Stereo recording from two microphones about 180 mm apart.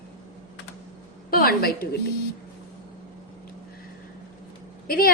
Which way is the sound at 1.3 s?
55° left (ahead or behind).